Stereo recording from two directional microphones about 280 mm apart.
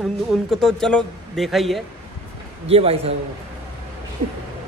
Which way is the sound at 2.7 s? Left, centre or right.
Right.